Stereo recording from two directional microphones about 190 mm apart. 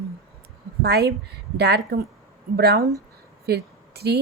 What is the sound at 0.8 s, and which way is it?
Speech, 55° right (ahead or behind).